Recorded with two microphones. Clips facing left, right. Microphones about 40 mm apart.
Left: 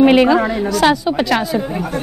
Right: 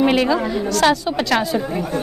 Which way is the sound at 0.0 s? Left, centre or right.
Centre.